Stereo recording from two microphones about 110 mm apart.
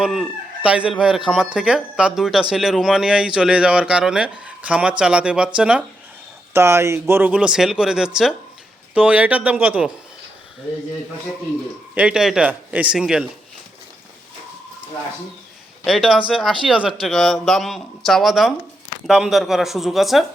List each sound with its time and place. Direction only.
0.0 s speech: 5° right (ahead or behind)
6.5 s speech: 25° right (ahead or behind)
7.1 s speech: 15° right (ahead or behind)
11.9 s speech: 10° right (ahead or behind)
15.8 s speech: centre (ahead or behind)